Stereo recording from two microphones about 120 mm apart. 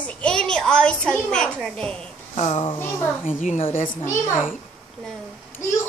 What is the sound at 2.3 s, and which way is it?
Speech, 70° left (ahead or behind).